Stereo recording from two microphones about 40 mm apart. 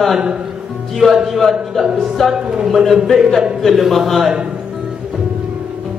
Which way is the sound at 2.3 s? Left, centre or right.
Centre.